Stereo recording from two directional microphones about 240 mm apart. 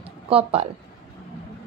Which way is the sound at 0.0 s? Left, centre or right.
Right.